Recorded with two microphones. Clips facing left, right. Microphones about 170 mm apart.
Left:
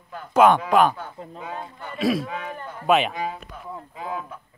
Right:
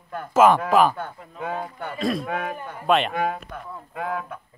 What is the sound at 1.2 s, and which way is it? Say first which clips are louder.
Speech: left 6 dB; 30° left (ahead or behind).